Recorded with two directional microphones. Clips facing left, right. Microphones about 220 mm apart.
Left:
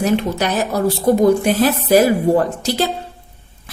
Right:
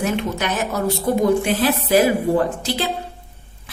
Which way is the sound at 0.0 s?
35° left (ahead or behind).